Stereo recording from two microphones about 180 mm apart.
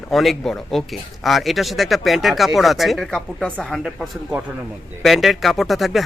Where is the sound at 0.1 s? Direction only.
Centre (ahead or behind).